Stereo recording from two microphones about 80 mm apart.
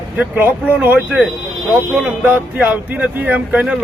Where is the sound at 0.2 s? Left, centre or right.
Right.